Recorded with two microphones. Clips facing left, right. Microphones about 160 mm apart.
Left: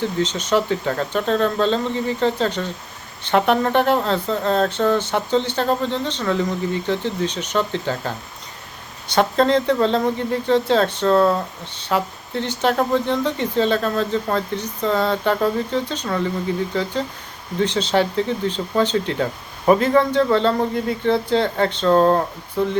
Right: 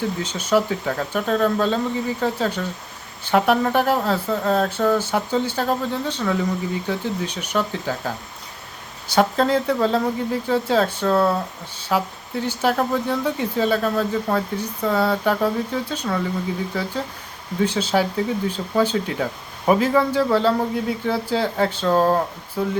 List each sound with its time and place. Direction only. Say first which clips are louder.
0.0 s speech: left 3 dB; 10° right (ahead or behind)